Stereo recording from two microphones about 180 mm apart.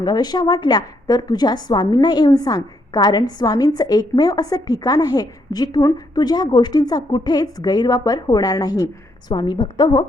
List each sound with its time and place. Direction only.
0.0 s a woman's voice: 20° left (ahead or behind)